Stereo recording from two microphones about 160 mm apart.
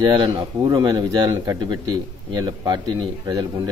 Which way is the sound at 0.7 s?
25° right (ahead or behind).